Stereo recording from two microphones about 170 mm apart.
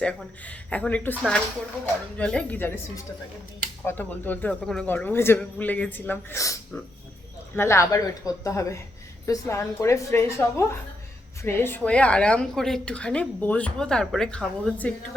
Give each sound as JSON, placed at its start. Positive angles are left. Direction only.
{"t": 0.0, "sound": "a woman's voice", "side_deg": 10}
{"t": 2.1, "sound": "a woman's voice", "side_deg": 5}